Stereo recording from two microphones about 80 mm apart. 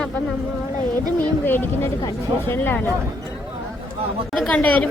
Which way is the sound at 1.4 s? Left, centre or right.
Left.